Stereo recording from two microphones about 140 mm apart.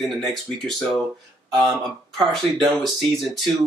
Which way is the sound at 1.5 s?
Centre (ahead or behind).